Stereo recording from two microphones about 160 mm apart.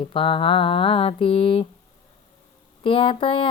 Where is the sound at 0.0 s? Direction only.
35° left (ahead or behind).